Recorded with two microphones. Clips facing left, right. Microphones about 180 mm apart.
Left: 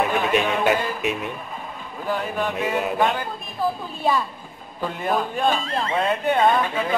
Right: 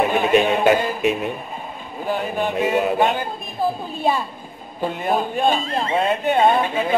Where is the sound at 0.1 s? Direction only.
25° right (ahead or behind).